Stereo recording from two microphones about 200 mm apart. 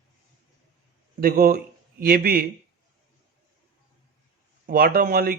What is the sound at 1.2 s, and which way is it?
A man's voice, 45° right (ahead or behind).